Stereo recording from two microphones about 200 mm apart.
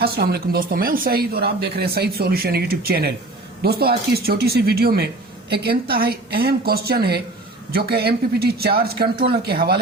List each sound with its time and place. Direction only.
0.0 s speech: 50° right (ahead or behind)